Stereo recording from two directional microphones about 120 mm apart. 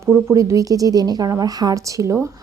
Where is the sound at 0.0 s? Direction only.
25° right (ahead or behind).